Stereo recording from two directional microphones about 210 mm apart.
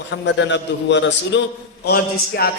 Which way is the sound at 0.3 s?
60° left (ahead or behind).